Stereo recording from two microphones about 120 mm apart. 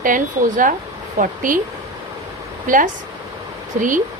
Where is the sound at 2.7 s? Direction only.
90° right.